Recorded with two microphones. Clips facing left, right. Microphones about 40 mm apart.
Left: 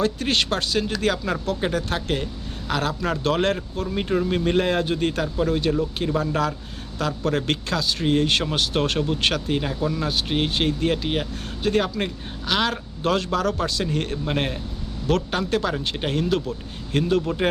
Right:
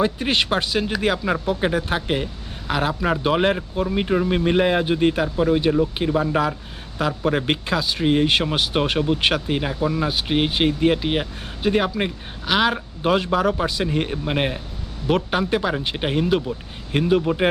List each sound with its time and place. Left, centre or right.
0.0 s speech: centre